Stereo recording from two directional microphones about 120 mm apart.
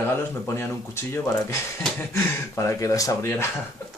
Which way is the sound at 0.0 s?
20° left (ahead or behind).